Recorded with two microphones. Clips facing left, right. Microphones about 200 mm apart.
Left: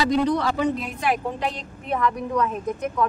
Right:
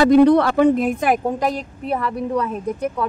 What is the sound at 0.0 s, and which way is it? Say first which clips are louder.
A woman's voice: right 9 dB; 55° right (ahead or behind).